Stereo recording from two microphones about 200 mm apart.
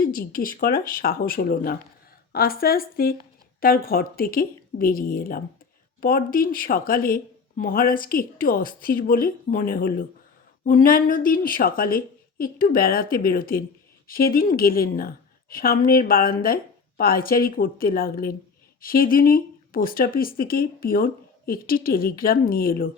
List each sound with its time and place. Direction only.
0.0 s speech: 45° left (ahead or behind)